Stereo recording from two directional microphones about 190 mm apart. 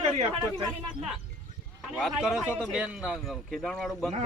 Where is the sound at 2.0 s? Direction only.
Centre (ahead or behind).